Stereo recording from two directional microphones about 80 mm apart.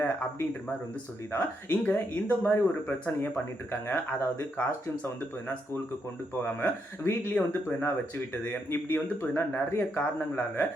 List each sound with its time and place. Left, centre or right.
1.3 s speech: left
6.4 s speech: left